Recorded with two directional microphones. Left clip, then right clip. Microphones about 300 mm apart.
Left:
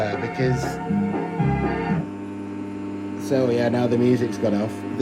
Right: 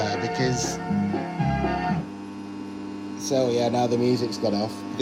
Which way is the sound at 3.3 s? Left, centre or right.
Left.